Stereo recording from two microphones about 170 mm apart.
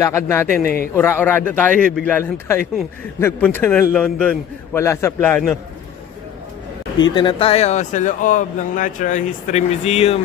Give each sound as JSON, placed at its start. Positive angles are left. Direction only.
{"t": 0.0, "sound": "a man's voice", "side_deg": 15}
{"t": 4.7, "sound": "a man's voice", "side_deg": 15}
{"t": 7.0, "sound": "speech", "side_deg": 25}